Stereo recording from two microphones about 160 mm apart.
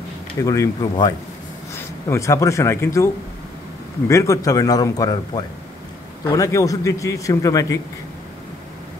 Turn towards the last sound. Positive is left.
turn(degrees=20)  # may be behind; listen again after turning